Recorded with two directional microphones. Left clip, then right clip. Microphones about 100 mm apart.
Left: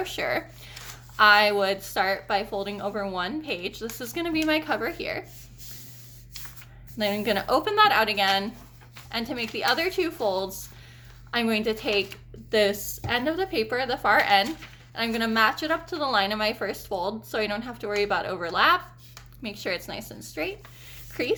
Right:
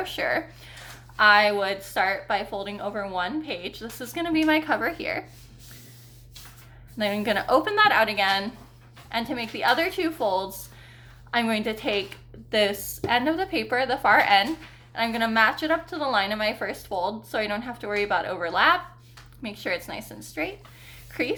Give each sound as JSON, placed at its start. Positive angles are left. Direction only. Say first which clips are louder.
{"t": 0.0, "sound": "speech", "louder": "right 2 dB", "side_deg": 50}
{"t": 7.0, "sound": "a woman's voice", "louder": "right 1 dB", "side_deg": 45}
{"t": 21.1, "sound": "a sound", "louder": "left 1 dB", "side_deg": 45}